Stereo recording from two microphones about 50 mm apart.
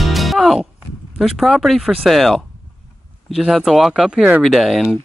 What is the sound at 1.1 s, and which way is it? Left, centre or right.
Speech, centre.